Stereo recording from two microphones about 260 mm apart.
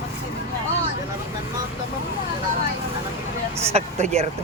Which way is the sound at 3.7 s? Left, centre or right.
Right.